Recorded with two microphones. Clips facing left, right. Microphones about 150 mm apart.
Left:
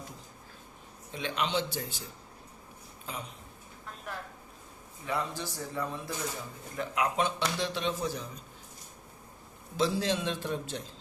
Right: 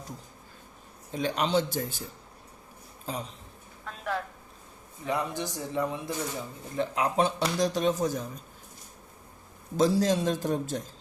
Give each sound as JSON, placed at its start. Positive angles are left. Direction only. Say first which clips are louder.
{"t": 1.1, "sound": "a man's voice", "louder": "right 5 dB", "side_deg": -40}
{"t": 3.1, "sound": "a man's voice", "louder": "right 6 dB", "side_deg": -35}
{"t": 3.8, "sound": "a sound", "louder": "right 9 dB", "side_deg": -90}
{"t": 5.0, "sound": "speech", "louder": "right 3 dB", "side_deg": -20}
{"t": 6.7, "sound": "a man's voice", "louder": "right 4 dB", "side_deg": -35}
{"t": 9.7, "sound": "a man's voice", "louder": "right 5 dB", "side_deg": -40}